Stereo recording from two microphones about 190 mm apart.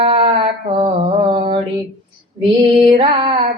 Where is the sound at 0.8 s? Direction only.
30° right (ahead or behind).